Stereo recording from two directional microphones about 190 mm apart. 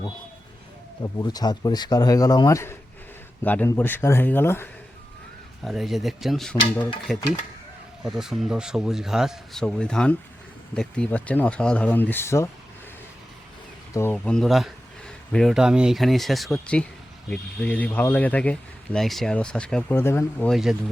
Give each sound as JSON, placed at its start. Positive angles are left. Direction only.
{"t": 1.0, "sound": "speech", "side_deg": 20}
{"t": 5.6, "sound": "speech", "side_deg": 0}
{"t": 13.9, "sound": "speech", "side_deg": 10}
{"t": 20.5, "sound": "speech", "side_deg": 0}